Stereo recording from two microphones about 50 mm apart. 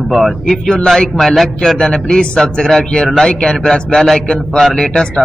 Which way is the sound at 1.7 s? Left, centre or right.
Centre.